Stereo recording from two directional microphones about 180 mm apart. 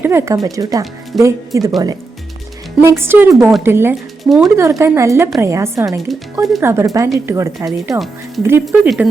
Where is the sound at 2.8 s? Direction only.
15° right (ahead or behind).